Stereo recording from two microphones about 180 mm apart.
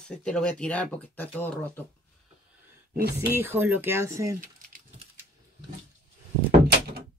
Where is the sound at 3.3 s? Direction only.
15° right (ahead or behind).